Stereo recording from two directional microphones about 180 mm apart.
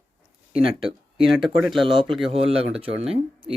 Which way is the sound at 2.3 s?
35° right (ahead or behind).